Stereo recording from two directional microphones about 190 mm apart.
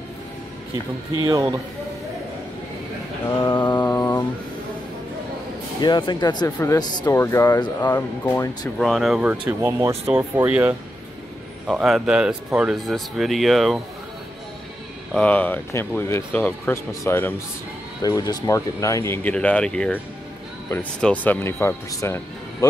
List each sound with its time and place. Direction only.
1.2 s speech: 20° right (ahead or behind)
3.5 s mantra: 25° left (ahead or behind)
5.8 s speech: 25° left (ahead or behind)
8.7 s speech: centre (ahead or behind)
15.1 s speech: 10° left (ahead or behind)